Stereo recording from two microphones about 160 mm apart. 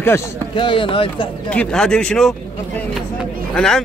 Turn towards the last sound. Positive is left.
turn(degrees=5)  # may be behind; listen again after turning